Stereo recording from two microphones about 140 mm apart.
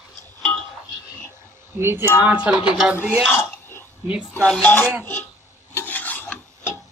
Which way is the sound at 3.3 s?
15° left (ahead or behind).